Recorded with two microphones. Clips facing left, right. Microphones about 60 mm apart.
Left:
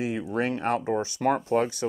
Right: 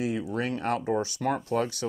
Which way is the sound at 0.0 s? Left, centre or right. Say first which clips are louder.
Left 2 dB; left.